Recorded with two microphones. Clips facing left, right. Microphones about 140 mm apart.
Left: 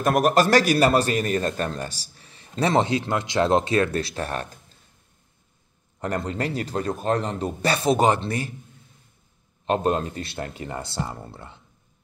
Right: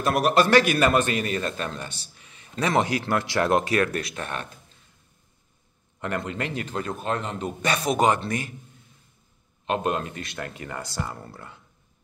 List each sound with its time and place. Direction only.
0.0 s a man's voice: 45° left (ahead or behind)
5.9 s a man's voice: 35° left (ahead or behind)
9.7 s speech: 35° left (ahead or behind)